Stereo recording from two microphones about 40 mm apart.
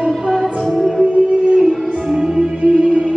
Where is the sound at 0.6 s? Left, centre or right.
Centre.